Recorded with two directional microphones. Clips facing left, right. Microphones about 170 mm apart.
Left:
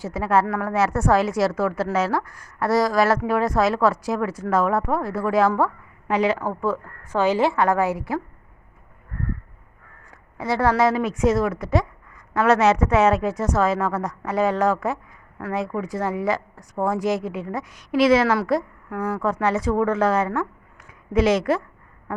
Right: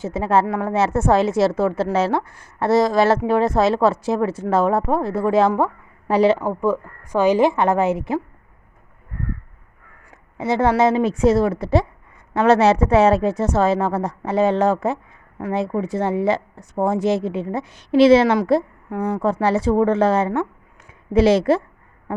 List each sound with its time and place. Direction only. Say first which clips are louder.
0.0 s a woman's voice: right 2 dB; 25° right (ahead or behind)
6.1 s a woman's voice: right 5 dB; 30° right (ahead or behind)
6.4 s a woman's voice: right 4 dB; 15° right (ahead or behind)
10.3 s a woman's voice: right 3 dB; 20° right (ahead or behind)